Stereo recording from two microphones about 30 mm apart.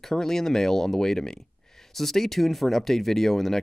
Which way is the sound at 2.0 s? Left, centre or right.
Centre.